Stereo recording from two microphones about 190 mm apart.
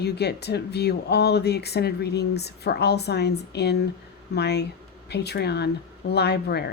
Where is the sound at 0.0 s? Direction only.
60° left (ahead or behind).